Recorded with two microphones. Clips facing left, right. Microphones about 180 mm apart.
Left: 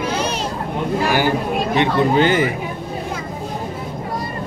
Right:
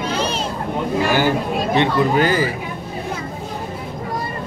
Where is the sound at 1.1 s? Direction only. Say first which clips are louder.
Even; 15° left (ahead or behind).